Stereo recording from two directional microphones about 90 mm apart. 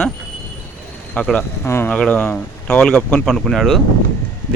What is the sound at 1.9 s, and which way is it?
Speech, 15° left (ahead or behind).